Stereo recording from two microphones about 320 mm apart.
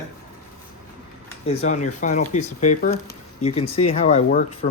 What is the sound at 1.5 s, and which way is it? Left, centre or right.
Speech, left.